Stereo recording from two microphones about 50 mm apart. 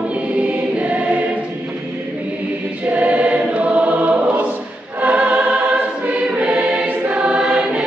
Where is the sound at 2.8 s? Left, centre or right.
Right.